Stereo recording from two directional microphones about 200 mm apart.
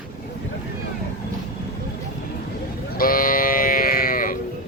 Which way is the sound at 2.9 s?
45° left (ahead or behind).